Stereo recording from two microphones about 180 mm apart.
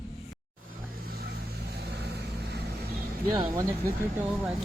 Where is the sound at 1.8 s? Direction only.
65° right (ahead or behind).